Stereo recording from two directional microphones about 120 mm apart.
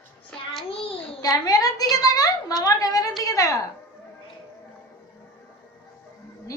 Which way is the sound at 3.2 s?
30° left (ahead or behind).